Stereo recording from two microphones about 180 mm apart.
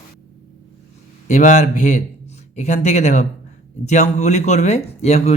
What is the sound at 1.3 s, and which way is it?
Speech, 40° left (ahead or behind).